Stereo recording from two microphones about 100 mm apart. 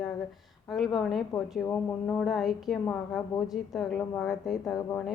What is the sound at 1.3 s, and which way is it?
Speech, 40° left (ahead or behind).